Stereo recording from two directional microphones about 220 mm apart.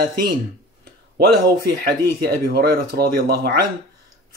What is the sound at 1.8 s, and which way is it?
Speech, 45° right (ahead or behind).